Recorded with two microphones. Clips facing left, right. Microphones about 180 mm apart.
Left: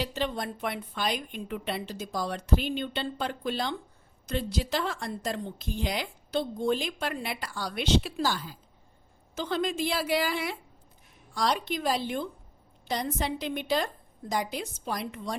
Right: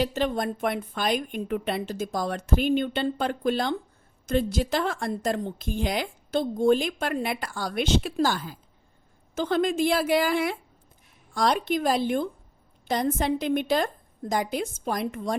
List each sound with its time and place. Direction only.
0.0 s a woman's voice: 50° right (ahead or behind)